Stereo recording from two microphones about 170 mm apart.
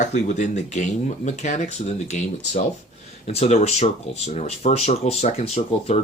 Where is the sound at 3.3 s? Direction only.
40° left (ahead or behind).